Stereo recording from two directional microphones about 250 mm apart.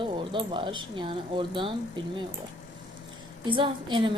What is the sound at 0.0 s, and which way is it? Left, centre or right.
A woman's voice, centre.